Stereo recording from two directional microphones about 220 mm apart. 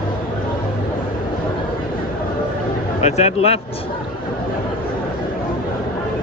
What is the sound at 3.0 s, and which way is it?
Speech, 30° left (ahead or behind).